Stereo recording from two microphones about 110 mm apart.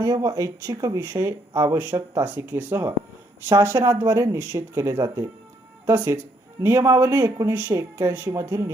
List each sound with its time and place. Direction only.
0.0 s speech: 30° right (ahead or behind)